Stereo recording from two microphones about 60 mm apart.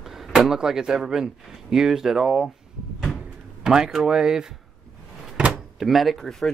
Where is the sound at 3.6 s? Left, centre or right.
Centre.